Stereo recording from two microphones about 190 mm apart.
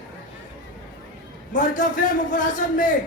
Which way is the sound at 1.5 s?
45° left (ahead or behind).